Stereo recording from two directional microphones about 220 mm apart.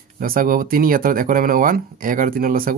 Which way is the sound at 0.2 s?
40° right (ahead or behind).